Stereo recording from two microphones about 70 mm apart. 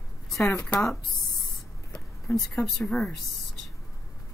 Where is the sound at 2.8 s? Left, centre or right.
Centre.